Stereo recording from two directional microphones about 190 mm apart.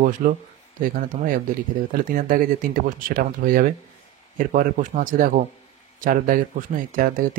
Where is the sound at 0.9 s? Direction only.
45° right (ahead or behind).